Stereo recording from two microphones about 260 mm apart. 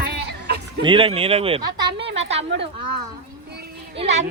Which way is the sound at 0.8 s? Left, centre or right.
Centre.